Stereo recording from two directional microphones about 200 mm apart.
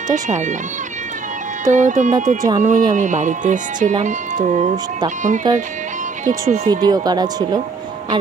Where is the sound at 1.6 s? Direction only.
40° right (ahead or behind).